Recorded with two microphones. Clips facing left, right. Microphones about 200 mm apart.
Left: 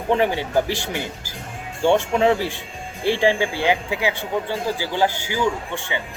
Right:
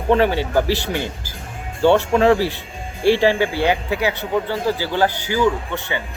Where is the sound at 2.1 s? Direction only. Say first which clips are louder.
Right 3 dB; 15° left (ahead or behind).